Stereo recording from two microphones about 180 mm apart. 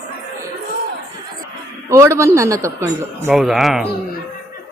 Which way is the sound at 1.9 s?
15° right (ahead or behind).